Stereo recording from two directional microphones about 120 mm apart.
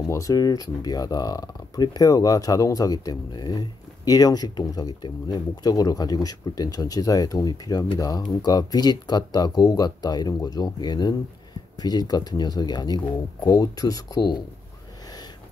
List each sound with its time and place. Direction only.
0.1 s speech: 30° left (ahead or behind)